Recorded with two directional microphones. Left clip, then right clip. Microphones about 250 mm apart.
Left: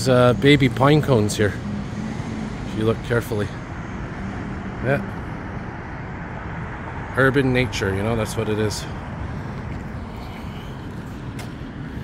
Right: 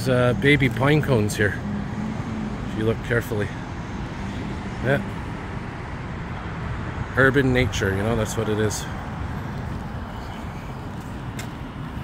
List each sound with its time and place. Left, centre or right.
0.0 s speech: centre
2.8 s speech: centre
4.9 s speech: centre
7.2 s speech: centre